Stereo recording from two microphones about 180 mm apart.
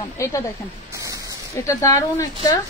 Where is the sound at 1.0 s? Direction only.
20° right (ahead or behind).